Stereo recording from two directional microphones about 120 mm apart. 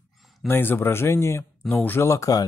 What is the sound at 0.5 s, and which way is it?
Speech, 20° left (ahead or behind).